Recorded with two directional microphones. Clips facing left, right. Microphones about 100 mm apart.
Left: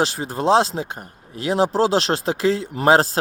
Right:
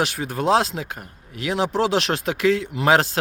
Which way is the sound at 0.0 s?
30° left (ahead or behind).